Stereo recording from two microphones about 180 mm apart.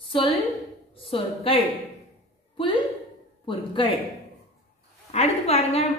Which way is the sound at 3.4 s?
30° left (ahead or behind).